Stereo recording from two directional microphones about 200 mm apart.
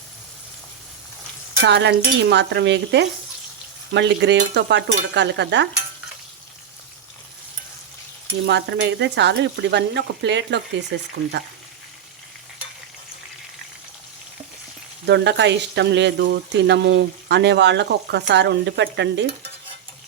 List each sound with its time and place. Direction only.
1.6 s speech: 60° right (ahead or behind)
8.4 s speech: 60° right (ahead or behind)
15.0 s speech: 60° right (ahead or behind)